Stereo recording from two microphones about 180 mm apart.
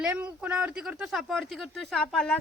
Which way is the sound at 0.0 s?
10° right (ahead or behind).